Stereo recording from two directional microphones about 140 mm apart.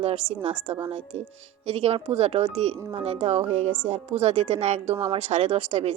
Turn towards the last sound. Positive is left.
turn(degrees=-45)  # may be behind; listen again after turning